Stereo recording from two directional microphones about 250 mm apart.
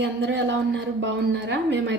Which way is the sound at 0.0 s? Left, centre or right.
Right.